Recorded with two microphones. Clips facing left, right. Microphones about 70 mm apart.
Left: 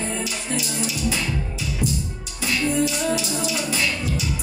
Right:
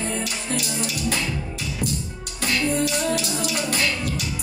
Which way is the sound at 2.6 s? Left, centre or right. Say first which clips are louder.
Left 2 dB; centre.